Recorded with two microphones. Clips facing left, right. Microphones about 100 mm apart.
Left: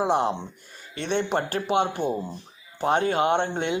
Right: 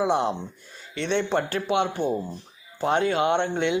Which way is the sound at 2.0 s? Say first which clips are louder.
Right 1 dB; 15° left (ahead or behind).